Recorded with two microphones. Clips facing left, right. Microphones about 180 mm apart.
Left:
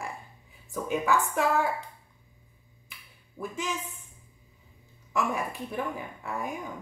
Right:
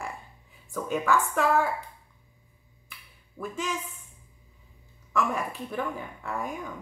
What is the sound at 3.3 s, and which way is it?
Speech, 15° left (ahead or behind).